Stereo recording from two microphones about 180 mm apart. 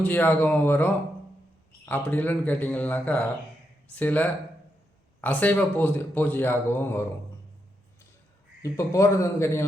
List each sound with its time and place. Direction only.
0.0 s speech: 10° left (ahead or behind)
8.6 s speech: 15° left (ahead or behind)